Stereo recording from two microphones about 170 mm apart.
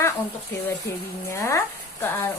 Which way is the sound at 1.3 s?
15° left (ahead or behind).